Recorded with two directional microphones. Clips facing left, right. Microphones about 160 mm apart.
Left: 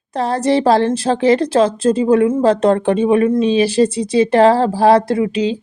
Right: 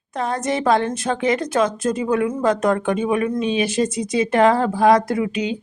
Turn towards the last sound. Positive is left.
turn(degrees=30)  # may be behind; listen again after turning